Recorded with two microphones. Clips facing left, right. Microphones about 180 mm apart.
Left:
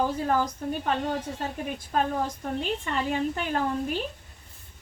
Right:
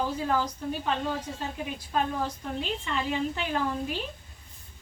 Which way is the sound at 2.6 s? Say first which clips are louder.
Left 1 dB; 50° left (ahead or behind).